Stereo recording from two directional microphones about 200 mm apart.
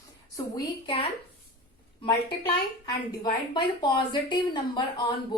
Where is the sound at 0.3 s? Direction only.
20° left (ahead or behind).